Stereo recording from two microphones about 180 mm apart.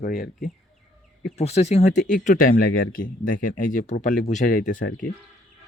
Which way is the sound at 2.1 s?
50° left (ahead or behind).